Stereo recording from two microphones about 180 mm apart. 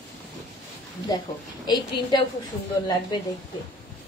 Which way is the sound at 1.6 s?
25° left (ahead or behind).